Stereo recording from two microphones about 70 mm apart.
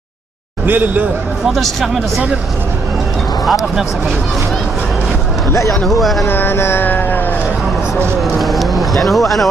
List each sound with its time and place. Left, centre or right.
0.7 s a man's voice: right
1.5 s speech: centre
5.9 s speech: centre
6.2 s mantra: left
8.2 s music: centre